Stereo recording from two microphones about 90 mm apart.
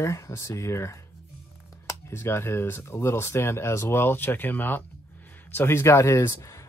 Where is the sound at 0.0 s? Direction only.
35° left (ahead or behind).